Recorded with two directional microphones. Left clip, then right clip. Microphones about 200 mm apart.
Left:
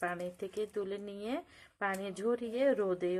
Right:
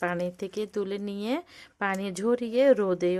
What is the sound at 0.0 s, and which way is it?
Speech, 50° right (ahead or behind).